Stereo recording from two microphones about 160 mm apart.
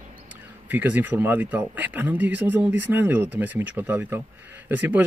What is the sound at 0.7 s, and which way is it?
Speech, 10° right (ahead or behind).